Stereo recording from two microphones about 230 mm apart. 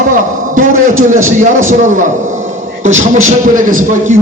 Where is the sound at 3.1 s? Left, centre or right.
Right.